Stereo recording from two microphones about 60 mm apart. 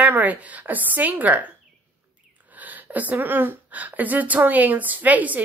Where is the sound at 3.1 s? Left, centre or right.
Right.